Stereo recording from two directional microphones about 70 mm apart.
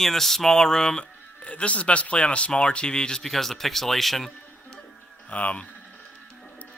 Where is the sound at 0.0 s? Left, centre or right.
Centre.